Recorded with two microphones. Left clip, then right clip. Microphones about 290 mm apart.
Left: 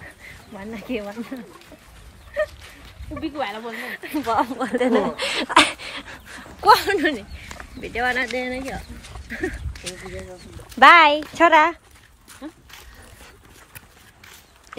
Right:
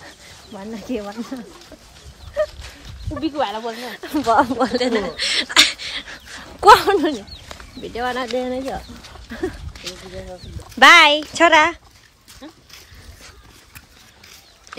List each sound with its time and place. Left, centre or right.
0.6 s speech: centre
3.2 s speech: centre
3.7 s speech: centre
4.1 s speech: centre
4.7 s a sound: centre
6.6 s speech: right
6.9 s speech: centre
9.9 s speech: centre
10.8 s speech: centre